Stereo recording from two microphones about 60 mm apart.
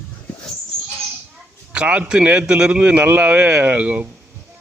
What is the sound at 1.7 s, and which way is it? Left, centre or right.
A man's voice, right.